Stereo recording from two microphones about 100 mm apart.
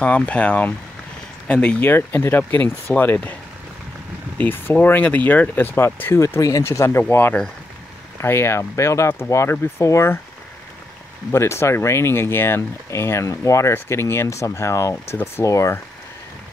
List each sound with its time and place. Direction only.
0.0 s speech: 15° left (ahead or behind)
4.4 s speech: 15° left (ahead or behind)
11.3 s speech: 25° left (ahead or behind)